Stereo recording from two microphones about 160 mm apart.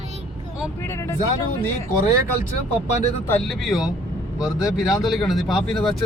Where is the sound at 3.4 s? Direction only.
Centre (ahead or behind).